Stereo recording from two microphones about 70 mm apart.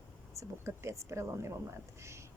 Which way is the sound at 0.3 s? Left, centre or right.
Right.